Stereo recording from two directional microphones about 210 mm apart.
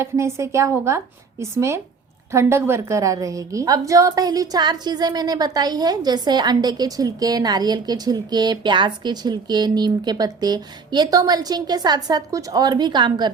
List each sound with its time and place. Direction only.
0.0 s a woman's voice: 15° right (ahead or behind)